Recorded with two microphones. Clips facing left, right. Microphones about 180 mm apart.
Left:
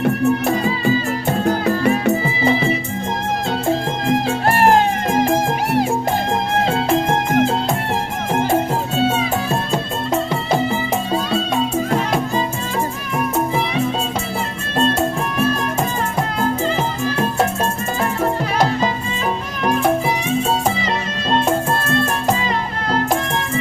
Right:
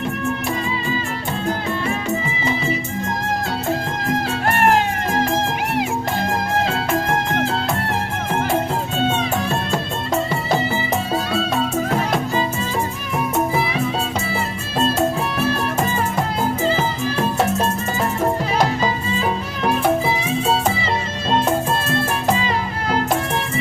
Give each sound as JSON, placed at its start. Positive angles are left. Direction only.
{"t": 0.3, "sound": "music", "side_deg": 40}
{"t": 4.4, "sound": "music", "side_deg": 35}
{"t": 6.7, "sound": "music", "side_deg": 25}
{"t": 9.0, "sound": "music", "side_deg": 5}
{"t": 14.3, "sound": "music", "side_deg": -5}
{"t": 16.4, "sound": "music", "side_deg": -5}
{"t": 19.6, "sound": "music", "side_deg": -5}